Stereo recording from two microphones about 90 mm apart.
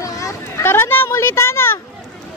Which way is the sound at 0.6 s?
25° left (ahead or behind).